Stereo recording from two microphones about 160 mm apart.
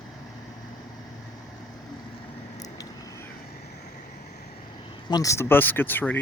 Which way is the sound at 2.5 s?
20° left (ahead or behind).